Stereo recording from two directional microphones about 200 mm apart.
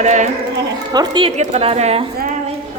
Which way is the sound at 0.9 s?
25° right (ahead or behind).